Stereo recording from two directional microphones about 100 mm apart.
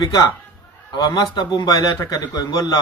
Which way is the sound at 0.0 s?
40° left (ahead or behind).